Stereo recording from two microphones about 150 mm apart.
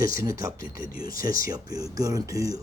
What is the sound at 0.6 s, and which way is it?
Speech, 70° left (ahead or behind).